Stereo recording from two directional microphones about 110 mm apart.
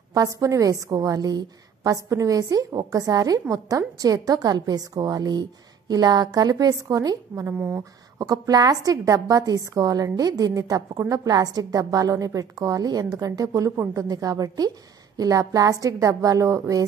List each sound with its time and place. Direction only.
0.1 s a woman's voice: 30° right (ahead or behind)
7.5 s speech: 15° right (ahead or behind)
8.2 s a woman's voice: 35° right (ahead or behind)